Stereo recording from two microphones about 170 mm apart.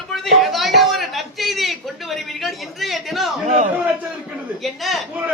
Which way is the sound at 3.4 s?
45° right (ahead or behind).